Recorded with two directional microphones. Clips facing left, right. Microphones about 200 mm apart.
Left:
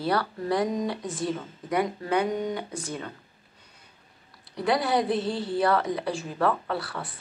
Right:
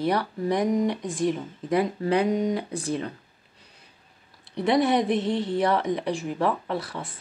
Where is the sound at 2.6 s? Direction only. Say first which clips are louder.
Right 5 dB; 35° right (ahead or behind).